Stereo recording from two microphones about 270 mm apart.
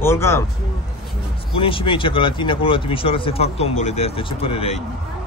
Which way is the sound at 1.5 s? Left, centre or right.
Centre.